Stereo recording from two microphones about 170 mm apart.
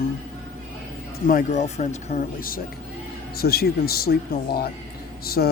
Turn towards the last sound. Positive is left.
turn(degrees=65)  # may be behind; listen again after turning